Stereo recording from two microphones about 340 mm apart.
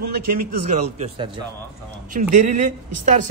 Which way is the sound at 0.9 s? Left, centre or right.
Centre.